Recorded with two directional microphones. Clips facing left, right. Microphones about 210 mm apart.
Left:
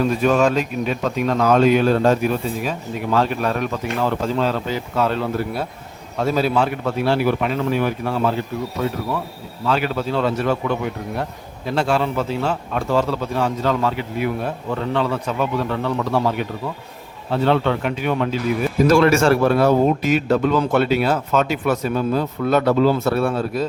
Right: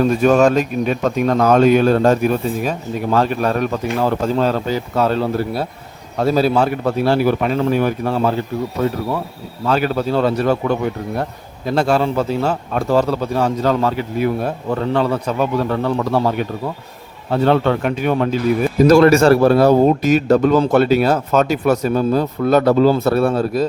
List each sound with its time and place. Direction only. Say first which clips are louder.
0.0 s a man's voice: right 4 dB; 45° right (ahead or behind)
9.6 s a man's voice: right 4 dB; 40° right (ahead or behind)
17.3 s a man's voice: right 3 dB; 45° right (ahead or behind)